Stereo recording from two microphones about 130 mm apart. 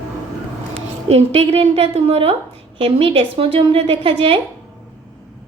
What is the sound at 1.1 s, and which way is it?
A woman's voice, 50° right (ahead or behind).